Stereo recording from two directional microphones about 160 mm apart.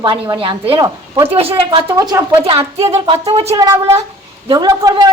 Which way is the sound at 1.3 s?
35° right (ahead or behind).